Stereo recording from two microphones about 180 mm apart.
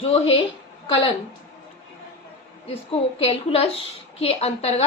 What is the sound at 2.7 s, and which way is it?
A woman's voice, 35° left (ahead or behind).